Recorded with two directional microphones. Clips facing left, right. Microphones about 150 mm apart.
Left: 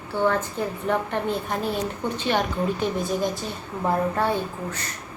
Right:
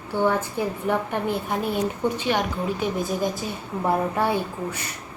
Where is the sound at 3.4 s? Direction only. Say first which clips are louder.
Right 1 dB; 10° right (ahead or behind).